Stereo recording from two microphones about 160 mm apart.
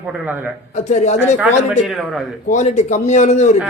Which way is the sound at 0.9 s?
45° left (ahead or behind).